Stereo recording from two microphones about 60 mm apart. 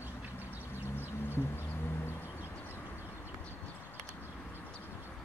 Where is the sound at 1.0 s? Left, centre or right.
Left.